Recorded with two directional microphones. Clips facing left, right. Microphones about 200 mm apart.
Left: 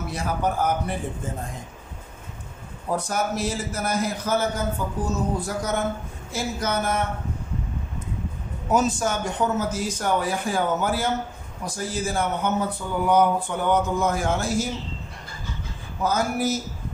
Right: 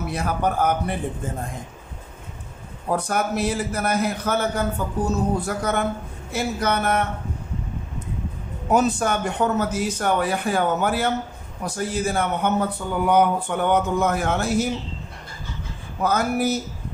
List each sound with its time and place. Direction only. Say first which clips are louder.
0.1 s speech: right 2 dB; 60° right (ahead or behind)
3.0 s speech: right 2 dB; 60° right (ahead or behind)
8.7 s speech: right 2 dB; 60° right (ahead or behind)
16.0 s speech: right 2 dB; 60° right (ahead or behind)